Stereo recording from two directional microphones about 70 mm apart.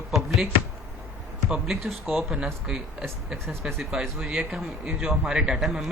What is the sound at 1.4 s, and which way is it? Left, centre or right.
A man's voice, centre.